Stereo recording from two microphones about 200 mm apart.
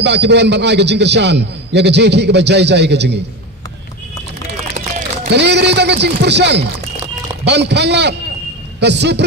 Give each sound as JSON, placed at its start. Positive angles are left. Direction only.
{"t": 0.0, "sound": "a man's voice", "side_deg": -60}
{"t": 5.3, "sound": "a man's voice", "side_deg": -60}